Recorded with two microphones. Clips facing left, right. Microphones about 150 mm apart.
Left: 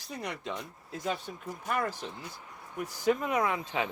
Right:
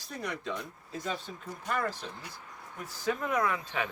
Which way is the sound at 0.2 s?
20° left (ahead or behind).